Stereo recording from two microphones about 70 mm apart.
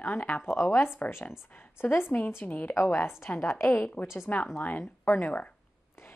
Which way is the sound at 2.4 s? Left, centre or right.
Left.